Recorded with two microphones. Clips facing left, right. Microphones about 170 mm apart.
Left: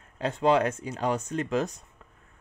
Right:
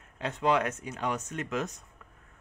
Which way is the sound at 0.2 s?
30° left (ahead or behind).